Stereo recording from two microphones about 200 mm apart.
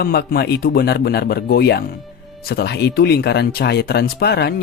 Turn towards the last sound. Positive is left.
turn(degrees=55)  # may be behind; listen again after turning